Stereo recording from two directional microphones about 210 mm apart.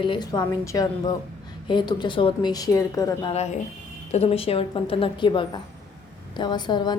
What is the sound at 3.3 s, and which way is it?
A woman's voice, 30° left (ahead or behind).